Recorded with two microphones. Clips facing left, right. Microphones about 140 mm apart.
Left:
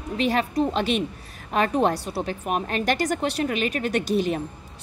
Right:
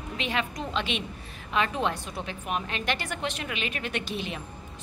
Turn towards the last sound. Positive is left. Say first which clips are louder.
# left 10 dB
turn(degrees=40)  # may be behind; listen again after turning